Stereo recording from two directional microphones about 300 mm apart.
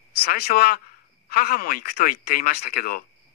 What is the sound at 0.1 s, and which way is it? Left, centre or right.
A woman's voice, left.